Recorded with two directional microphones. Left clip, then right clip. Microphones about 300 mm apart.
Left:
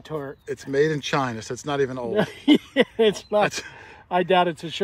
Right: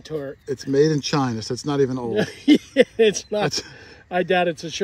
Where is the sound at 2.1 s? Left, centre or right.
Centre.